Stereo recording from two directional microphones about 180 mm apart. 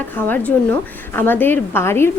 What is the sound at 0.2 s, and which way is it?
A woman's voice, 10° left (ahead or behind).